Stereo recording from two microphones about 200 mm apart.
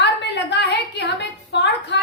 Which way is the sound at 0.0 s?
60° left (ahead or behind).